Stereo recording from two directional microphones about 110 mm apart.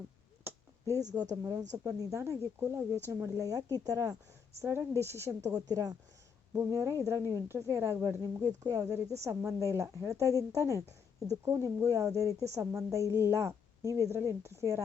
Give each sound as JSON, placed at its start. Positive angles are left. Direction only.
{"t": 0.4, "sound": "a sound", "side_deg": -25}
{"t": 1.2, "sound": "a woman's voice", "side_deg": -35}
{"t": 6.5, "sound": "a woman's voice", "side_deg": -25}
{"t": 8.4, "sound": "a woman's voice", "side_deg": -30}